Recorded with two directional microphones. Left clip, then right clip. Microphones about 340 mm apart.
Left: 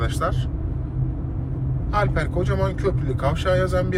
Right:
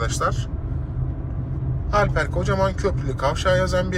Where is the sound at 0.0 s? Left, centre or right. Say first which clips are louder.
Right 2 dB; centre.